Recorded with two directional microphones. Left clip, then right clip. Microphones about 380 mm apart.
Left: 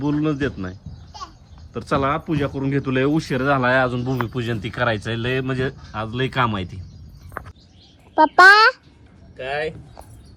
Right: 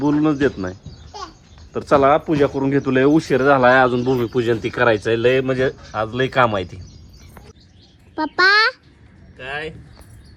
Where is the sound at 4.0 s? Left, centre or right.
Right.